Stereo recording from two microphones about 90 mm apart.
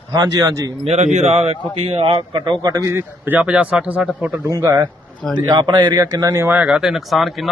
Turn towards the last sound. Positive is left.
turn(degrees=0)  # may be behind; listen again after turning